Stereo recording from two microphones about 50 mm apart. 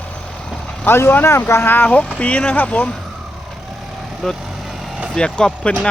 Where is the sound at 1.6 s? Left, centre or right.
Left.